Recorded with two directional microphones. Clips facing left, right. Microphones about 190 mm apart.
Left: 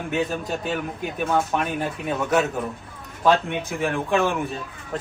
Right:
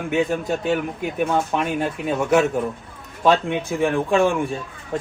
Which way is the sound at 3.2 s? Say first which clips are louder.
Right 2 dB; 15° right (ahead or behind).